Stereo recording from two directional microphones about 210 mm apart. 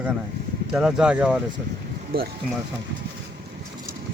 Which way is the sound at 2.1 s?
45° right (ahead or behind).